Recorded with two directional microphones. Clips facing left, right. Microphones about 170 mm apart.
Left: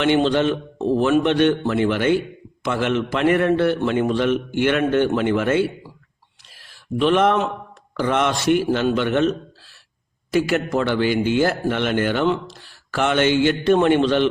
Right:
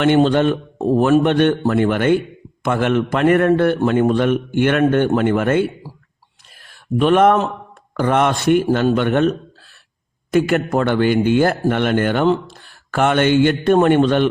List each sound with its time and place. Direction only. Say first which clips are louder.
0.0 s a man's voice: right 4 dB; 50° right (ahead or behind)
10.3 s a man's voice: right 3 dB; 50° right (ahead or behind)